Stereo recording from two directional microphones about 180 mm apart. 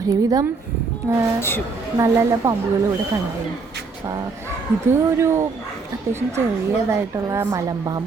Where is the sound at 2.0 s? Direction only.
15° right (ahead or behind).